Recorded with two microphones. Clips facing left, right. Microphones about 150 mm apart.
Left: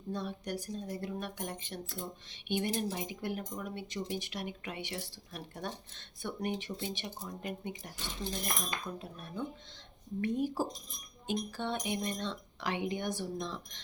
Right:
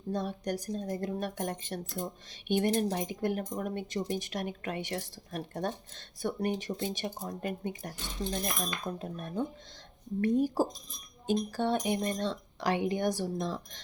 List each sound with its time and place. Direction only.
0.1 s speech: 45° right (ahead or behind)